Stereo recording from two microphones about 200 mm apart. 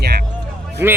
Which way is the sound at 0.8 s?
10° right (ahead or behind).